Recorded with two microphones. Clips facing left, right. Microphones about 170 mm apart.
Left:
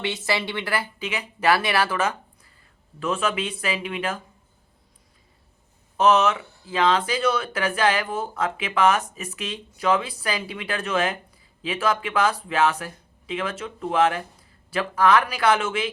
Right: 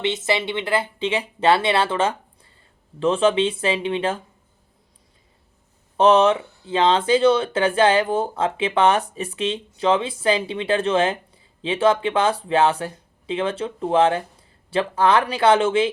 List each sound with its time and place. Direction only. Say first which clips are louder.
0.0 s speech: right 4 dB; 20° right (ahead or behind)
6.0 s speech: right 4 dB; 30° right (ahead or behind)